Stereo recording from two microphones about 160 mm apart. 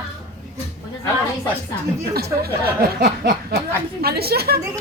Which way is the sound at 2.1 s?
75° right (ahead or behind).